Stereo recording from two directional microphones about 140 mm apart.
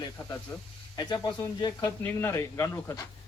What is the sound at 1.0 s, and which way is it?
Speech, 30° left (ahead or behind).